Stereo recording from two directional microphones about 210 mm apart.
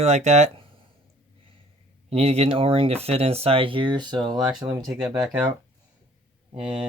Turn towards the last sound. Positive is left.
turn(degrees=-5)  # may be behind; listen again after turning